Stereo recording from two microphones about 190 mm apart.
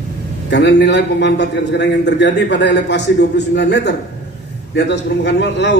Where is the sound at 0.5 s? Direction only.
65° left (ahead or behind).